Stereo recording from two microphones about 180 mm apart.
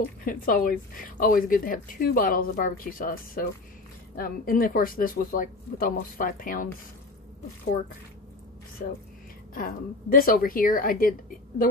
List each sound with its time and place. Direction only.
0.2 s speech: 50° left (ahead or behind)
9.5 s speech: 50° left (ahead or behind)